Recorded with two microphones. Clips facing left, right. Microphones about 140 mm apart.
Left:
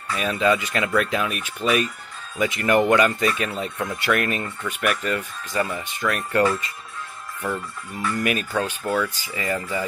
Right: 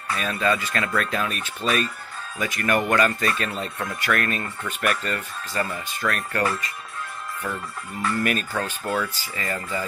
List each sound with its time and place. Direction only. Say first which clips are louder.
0.1 s speech: left 3 dB; 20° left (ahead or behind)
3.9 s speech: left 2 dB; 20° left (ahead or behind)
8.2 s speech: left 3 dB; 10° left (ahead or behind)